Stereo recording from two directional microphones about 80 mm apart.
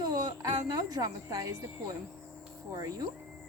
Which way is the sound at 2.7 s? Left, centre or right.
Right.